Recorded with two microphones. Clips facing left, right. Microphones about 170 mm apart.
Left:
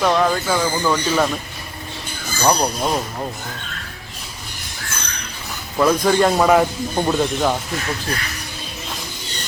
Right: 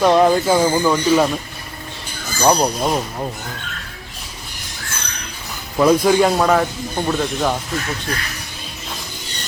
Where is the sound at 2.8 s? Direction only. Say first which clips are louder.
Right 1 dB; 5° right (ahead or behind).